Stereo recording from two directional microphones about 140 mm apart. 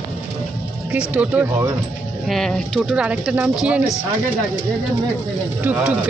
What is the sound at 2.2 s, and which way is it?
Speech, centre (ahead or behind).